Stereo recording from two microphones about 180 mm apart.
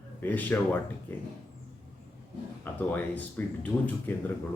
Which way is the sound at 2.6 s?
10° left (ahead or behind).